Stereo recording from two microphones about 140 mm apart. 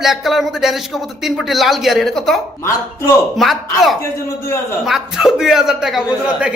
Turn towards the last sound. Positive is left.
turn(degrees=-5)  # may be behind; listen again after turning